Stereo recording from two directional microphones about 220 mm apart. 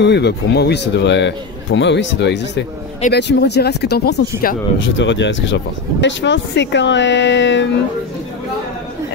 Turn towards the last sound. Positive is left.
turn(degrees=55)  # may be behind; listen again after turning